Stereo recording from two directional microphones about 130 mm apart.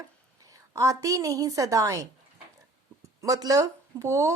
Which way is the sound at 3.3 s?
25° right (ahead or behind).